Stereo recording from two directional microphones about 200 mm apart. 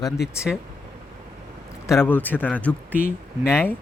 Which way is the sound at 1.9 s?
10° left (ahead or behind).